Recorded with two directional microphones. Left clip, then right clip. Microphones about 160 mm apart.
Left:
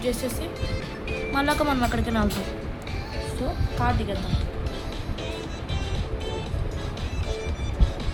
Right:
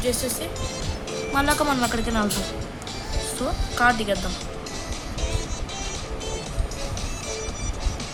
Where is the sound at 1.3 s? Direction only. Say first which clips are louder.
Right 2 dB; 15° right (ahead or behind).